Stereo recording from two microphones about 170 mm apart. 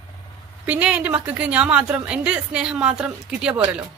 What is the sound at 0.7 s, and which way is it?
A woman's voice, 5° right (ahead or behind).